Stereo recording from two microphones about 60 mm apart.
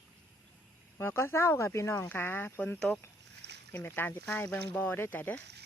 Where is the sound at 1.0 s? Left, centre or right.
Left.